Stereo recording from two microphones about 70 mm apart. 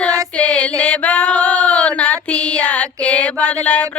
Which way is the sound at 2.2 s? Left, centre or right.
Centre.